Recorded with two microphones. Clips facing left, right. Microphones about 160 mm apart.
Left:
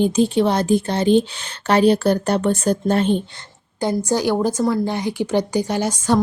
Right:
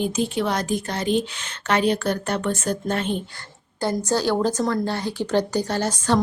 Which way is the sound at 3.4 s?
15° left (ahead or behind).